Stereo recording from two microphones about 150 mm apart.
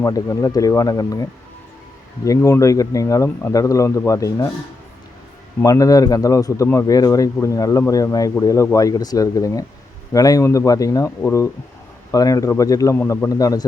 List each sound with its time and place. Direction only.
0.0 s speech: 25° left (ahead or behind)
5.6 s speech: 20° left (ahead or behind)